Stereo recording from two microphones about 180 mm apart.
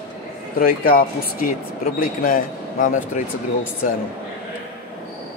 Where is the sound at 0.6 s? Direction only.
55° left (ahead or behind).